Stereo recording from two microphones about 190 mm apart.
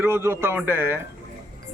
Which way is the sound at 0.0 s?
15° right (ahead or behind).